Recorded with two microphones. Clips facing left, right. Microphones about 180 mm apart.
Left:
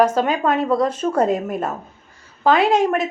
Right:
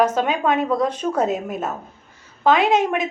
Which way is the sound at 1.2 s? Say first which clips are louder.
Left 3 dB; 5° right (ahead or behind).